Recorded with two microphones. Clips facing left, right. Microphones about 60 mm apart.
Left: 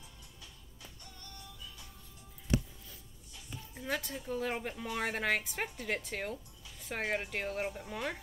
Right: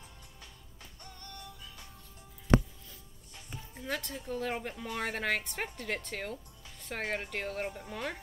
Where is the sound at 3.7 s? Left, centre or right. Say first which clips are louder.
Even; centre.